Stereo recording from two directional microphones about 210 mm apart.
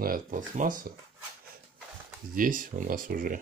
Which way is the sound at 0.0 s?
45° right (ahead or behind).